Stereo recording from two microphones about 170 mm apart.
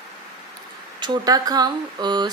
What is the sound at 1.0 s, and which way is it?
Speech, 25° right (ahead or behind).